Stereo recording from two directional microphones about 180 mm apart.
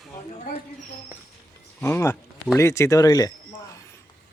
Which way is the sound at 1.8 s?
15° left (ahead or behind).